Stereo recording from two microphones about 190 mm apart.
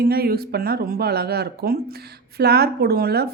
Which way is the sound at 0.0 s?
55° right (ahead or behind).